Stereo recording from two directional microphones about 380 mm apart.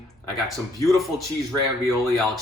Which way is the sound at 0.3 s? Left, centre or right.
Centre.